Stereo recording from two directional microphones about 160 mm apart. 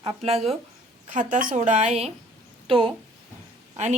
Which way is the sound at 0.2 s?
40° right (ahead or behind).